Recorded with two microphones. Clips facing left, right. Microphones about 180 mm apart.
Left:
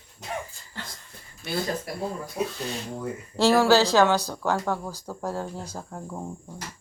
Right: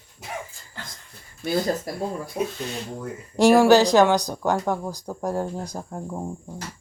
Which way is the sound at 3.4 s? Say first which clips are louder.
Right 4 dB; 15° right (ahead or behind).